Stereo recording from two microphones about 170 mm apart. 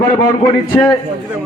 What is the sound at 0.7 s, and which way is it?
Speech, 20° left (ahead or behind).